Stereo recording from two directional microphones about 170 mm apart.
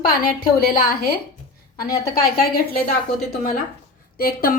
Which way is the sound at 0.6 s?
60° left (ahead or behind).